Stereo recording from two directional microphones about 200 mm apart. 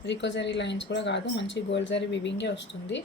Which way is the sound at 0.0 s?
60° left (ahead or behind).